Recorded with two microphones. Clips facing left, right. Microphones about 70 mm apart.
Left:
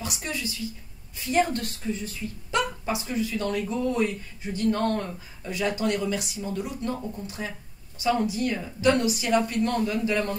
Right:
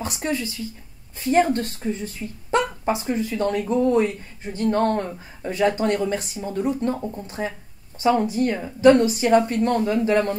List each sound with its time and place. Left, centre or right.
0.0 s a woman's voice: right